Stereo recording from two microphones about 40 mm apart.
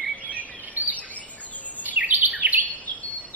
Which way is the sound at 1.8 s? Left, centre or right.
Right.